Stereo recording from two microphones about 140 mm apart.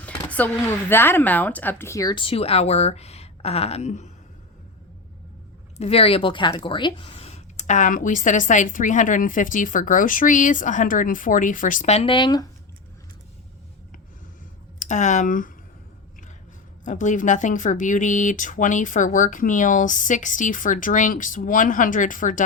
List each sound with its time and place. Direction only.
0.3 s speech: 10° left (ahead or behind); by 4.1 s 55° left (ahead or behind)
5.7 s speech: 45° left (ahead or behind); by 12.5 s 30° left (ahead or behind)
14.8 s speech: 60° left (ahead or behind)
16.8 s speech: 65° left (ahead or behind)